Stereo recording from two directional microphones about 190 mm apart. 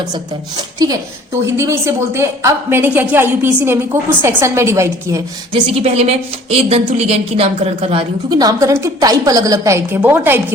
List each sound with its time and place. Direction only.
0.1 s a woman's voice: 20° right (ahead or behind)
5.5 s a woman's voice: 30° right (ahead or behind); by 10.4 s 10° right (ahead or behind)